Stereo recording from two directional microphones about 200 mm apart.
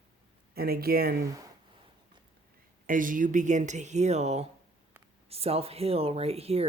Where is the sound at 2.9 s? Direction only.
40° right (ahead or behind).